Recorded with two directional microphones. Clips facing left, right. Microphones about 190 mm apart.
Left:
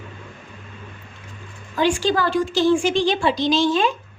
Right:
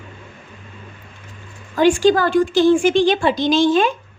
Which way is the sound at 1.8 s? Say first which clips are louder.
Right 6 dB; 50° right (ahead or behind).